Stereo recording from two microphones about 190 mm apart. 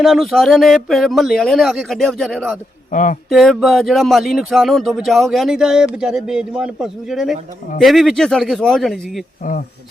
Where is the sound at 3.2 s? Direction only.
Centre (ahead or behind).